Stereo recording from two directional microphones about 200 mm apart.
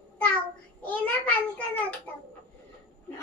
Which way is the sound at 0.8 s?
5° left (ahead or behind).